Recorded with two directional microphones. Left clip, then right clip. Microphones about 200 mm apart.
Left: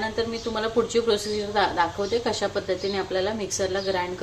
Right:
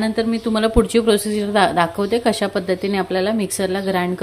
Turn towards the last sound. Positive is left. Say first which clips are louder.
# right 5 dB
turn(degrees=-45)  # may be behind; listen again after turning